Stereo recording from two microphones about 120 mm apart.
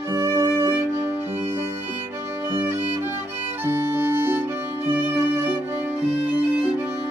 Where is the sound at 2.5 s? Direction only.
20° right (ahead or behind).